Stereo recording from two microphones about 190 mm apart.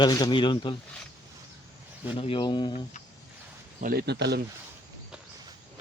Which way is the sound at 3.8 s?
50° right (ahead or behind).